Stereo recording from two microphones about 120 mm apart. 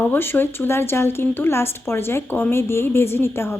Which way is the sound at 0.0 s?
15° left (ahead or behind).